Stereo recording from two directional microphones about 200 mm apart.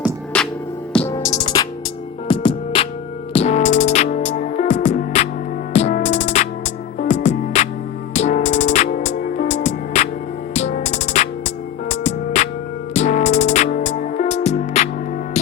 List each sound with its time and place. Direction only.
0.3 s music: 5° left (ahead or behind)
1.5 s music: 20° left (ahead or behind); by 14.8 s 35° left (ahead or behind)